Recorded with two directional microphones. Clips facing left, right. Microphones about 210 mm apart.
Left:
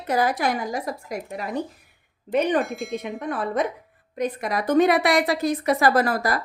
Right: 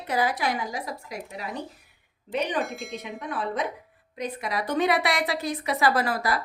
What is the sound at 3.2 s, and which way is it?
A woman's voice, 50° left (ahead or behind).